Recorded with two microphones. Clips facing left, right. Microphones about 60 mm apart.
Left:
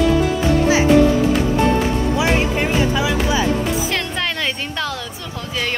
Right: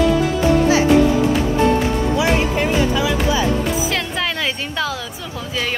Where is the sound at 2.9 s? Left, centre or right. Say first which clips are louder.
Even; left.